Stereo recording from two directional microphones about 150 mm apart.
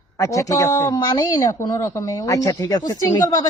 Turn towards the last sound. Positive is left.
turn(degrees=25)  # may be behind; listen again after turning